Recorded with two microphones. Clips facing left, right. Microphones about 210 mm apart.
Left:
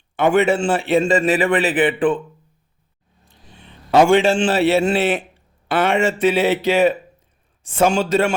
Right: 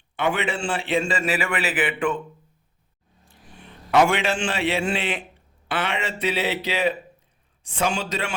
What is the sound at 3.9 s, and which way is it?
A man's voice, 30° left (ahead or behind).